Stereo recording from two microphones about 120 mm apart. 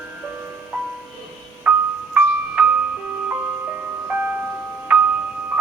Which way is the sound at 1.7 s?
10° right (ahead or behind).